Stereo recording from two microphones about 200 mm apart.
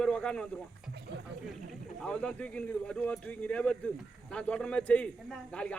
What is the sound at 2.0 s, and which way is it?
A man's voice, 5° left (ahead or behind).